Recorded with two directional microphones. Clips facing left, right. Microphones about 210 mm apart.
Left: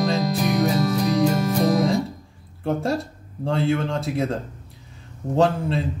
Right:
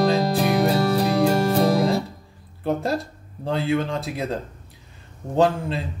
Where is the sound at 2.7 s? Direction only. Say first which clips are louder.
Even; centre (ahead or behind).